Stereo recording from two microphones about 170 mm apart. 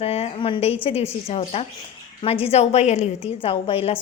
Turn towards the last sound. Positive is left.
turn(degrees=35)  # may be behind; listen again after turning